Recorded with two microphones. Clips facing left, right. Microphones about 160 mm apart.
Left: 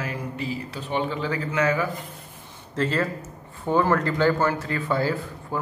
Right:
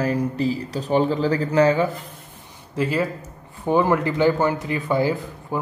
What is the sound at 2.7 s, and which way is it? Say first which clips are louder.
Speech: right 2 dB; 10° right (ahead or behind).